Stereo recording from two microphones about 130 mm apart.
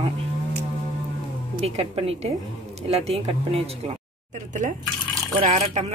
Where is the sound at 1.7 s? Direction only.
50° right (ahead or behind).